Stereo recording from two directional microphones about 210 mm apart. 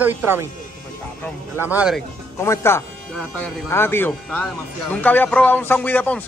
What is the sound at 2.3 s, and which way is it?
A man's voice, 15° left (ahead or behind).